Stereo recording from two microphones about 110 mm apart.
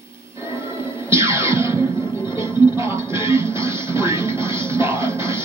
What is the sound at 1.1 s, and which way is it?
Music, 25° right (ahead or behind).